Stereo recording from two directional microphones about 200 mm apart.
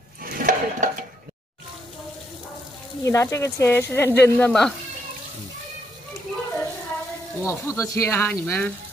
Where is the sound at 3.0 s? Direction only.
15° left (ahead or behind).